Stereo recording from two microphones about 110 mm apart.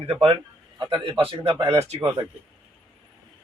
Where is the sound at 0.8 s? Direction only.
45° right (ahead or behind).